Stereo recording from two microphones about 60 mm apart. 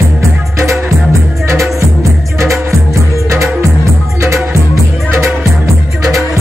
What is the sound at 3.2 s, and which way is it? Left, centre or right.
Music, right.